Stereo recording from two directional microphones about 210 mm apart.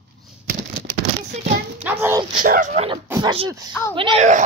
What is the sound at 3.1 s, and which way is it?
Speech, 20° right (ahead or behind).